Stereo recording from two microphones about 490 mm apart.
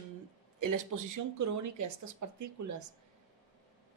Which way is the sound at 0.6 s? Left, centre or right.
Right.